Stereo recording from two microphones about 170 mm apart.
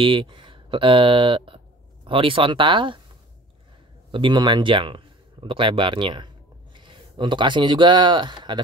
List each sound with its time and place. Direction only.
0.0 s speech: 30° right (ahead or behind)
4.1 s speech: 25° right (ahead or behind)